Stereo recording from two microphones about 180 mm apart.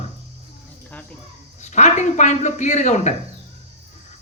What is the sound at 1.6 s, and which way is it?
A man's voice, 40° left (ahead or behind).